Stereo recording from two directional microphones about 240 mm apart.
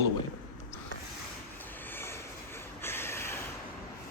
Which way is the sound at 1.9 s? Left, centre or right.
Centre.